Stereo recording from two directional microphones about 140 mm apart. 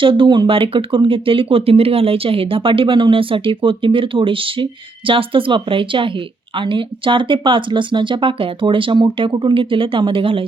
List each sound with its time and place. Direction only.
0.0 s speech: 35° right (ahead or behind)